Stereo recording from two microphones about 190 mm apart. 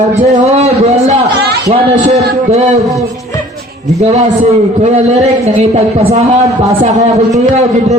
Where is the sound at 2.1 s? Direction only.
35° right (ahead or behind).